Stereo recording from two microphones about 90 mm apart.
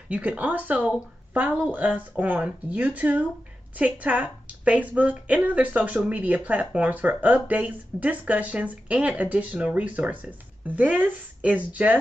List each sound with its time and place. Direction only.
0.1 s speech: 15° right (ahead or behind)